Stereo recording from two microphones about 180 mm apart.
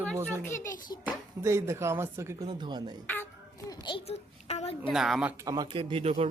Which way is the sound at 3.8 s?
30° left (ahead or behind).